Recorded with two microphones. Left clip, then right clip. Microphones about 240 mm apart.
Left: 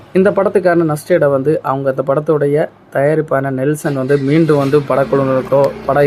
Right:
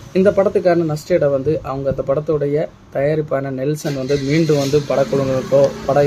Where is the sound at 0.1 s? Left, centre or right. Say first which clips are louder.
Left 2 dB; centre.